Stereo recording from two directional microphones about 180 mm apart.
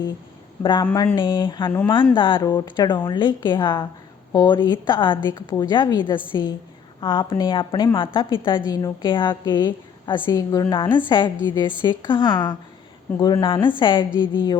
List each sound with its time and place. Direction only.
0.6 s a woman's voice: 25° left (ahead or behind)
0.9 s speech: 10° left (ahead or behind)
1.1 s a woman's voice: 25° left (ahead or behind)